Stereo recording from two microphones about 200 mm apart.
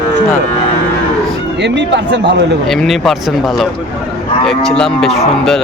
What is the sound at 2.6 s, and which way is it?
Speech, centre (ahead or behind).